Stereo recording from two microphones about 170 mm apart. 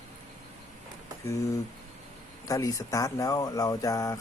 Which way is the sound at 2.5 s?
20° left (ahead or behind).